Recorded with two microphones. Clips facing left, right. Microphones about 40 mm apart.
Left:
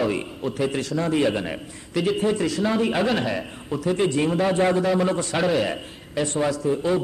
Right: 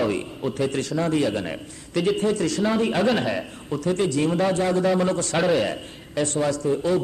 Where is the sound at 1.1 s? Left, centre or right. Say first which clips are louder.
Left 3 dB; centre.